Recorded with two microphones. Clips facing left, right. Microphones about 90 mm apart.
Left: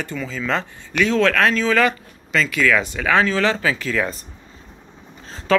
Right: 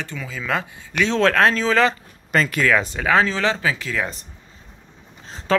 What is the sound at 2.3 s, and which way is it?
Speech, 45° right (ahead or behind).